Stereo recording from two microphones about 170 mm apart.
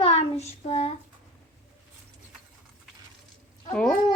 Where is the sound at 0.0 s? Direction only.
40° left (ahead or behind).